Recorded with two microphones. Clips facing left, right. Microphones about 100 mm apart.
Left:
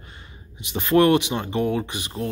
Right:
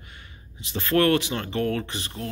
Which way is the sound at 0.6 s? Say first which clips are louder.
Left 4 dB; 20° left (ahead or behind).